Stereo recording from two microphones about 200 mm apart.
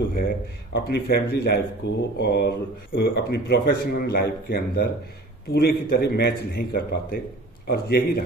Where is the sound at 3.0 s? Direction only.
55° left (ahead or behind).